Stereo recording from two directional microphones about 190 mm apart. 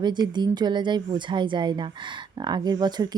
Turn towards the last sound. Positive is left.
turn(degrees=-20)  # may be behind; listen again after turning